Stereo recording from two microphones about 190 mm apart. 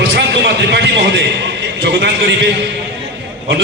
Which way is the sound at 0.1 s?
65° right (ahead or behind).